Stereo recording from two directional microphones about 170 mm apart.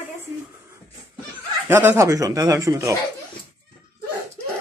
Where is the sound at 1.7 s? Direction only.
15° right (ahead or behind).